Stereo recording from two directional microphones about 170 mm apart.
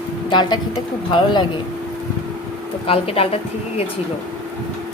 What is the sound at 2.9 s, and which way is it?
A woman's voice, 35° left (ahead or behind).